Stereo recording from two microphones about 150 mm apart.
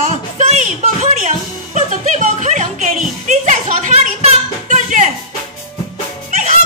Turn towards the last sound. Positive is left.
turn(degrees=-50)  # may be behind; listen again after turning